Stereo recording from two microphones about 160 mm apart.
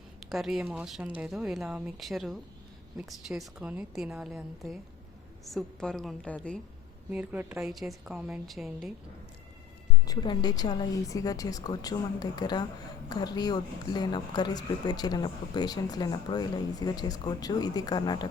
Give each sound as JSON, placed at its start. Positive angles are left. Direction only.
{"t": 0.2, "sound": "speech", "side_deg": 0}
{"t": 7.1, "sound": "speech", "side_deg": -10}
{"t": 10.1, "sound": "speech", "side_deg": 25}